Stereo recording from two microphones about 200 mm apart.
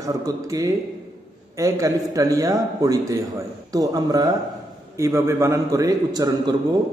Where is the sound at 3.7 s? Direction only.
20° right (ahead or behind).